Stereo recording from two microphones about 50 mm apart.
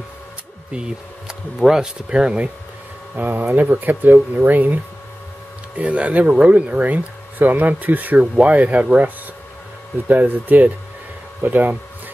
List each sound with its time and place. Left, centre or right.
0.7 s speech: centre
3.2 s speech: right
5.8 s speech: right
10.0 s speech: right